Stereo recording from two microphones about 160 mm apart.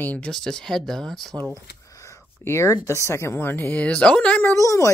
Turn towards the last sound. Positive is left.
turn(degrees=20)  # may be behind; listen again after turning